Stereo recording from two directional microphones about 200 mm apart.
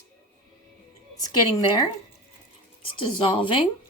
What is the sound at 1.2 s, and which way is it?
Speech, 20° left (ahead or behind).